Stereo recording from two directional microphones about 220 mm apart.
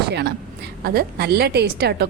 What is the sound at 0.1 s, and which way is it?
A woman's voice, 50° right (ahead or behind).